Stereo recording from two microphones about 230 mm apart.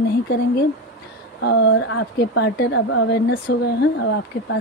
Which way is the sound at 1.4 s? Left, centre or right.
Left.